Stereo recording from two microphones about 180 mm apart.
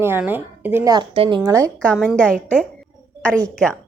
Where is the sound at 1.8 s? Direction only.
5° left (ahead or behind).